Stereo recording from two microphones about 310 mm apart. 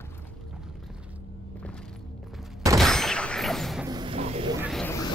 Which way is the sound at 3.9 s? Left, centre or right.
Centre.